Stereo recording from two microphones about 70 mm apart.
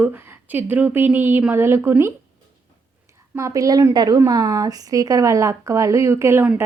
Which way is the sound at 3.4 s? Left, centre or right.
Right.